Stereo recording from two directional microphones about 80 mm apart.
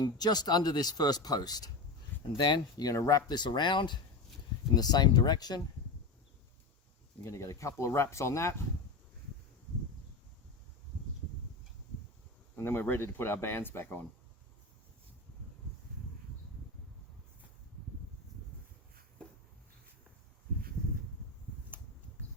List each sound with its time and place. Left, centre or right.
0.0 s speech: left
2.4 s speech: left
2.8 s speech: left
3.3 s speech: left
4.7 s speech: left
7.3 s speech: left
12.5 s speech: left